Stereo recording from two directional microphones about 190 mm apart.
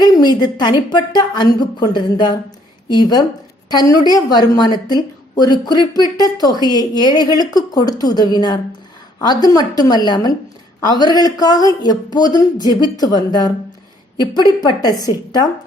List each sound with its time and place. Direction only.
0.0 s speech: 20° left (ahead or behind)